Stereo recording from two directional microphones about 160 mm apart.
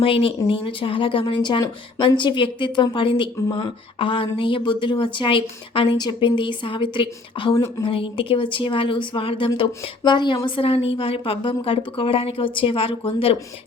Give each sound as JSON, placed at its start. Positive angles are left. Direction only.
{"t": 0.0, "sound": "speech", "side_deg": 35}
{"t": 7.5, "sound": "speech", "side_deg": 20}
{"t": 7.9, "sound": "speech", "side_deg": 35}